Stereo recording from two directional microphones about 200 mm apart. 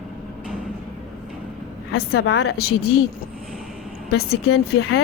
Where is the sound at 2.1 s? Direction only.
55° left (ahead or behind); by 2.5 s 75° left (ahead or behind).